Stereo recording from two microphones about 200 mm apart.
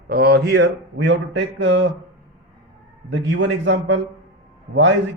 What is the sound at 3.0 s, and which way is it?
Speech, 65° right (ahead or behind).